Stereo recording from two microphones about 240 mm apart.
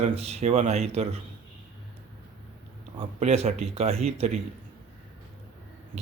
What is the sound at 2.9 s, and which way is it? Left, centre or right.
Speech, right.